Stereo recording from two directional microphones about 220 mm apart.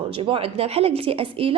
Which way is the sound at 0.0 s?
25° right (ahead or behind).